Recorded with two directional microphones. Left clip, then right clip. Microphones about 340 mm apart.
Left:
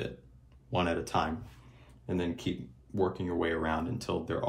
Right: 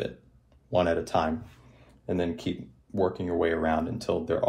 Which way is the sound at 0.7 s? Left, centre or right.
Centre.